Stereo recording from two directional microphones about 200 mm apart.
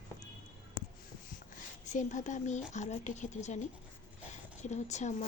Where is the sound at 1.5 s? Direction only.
40° left (ahead or behind).